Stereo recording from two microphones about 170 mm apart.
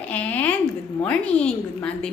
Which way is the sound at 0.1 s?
10° left (ahead or behind).